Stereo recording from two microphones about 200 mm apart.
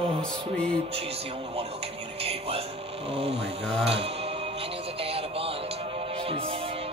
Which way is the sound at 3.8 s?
30° right (ahead or behind).